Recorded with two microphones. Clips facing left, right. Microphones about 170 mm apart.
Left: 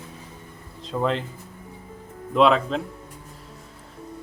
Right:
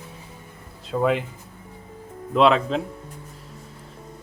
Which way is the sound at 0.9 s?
10° right (ahead or behind).